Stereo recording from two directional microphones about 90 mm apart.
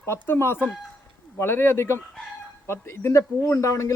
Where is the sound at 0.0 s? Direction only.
30° left (ahead or behind).